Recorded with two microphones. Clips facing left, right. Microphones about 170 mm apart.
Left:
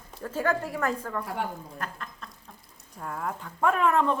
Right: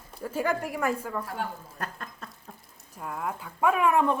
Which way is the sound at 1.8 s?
45° right (ahead or behind).